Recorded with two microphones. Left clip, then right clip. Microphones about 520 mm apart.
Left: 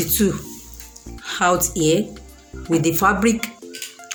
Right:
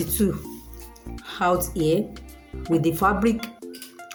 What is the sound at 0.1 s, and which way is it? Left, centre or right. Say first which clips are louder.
Speech: left 4 dB; right.